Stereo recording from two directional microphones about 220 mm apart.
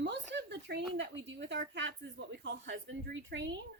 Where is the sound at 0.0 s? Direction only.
50° right (ahead or behind).